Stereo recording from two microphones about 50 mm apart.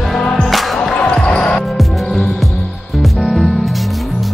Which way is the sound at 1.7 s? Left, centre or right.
Centre.